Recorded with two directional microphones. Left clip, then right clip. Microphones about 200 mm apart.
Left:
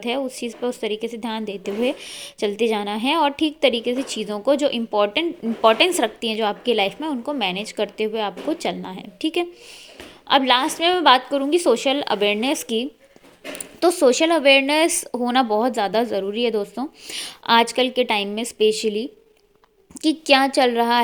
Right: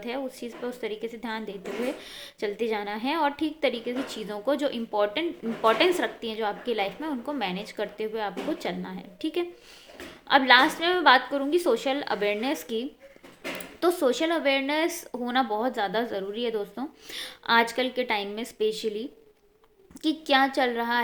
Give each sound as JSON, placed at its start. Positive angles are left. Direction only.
{"t": 0.0, "sound": "speech", "side_deg": 35}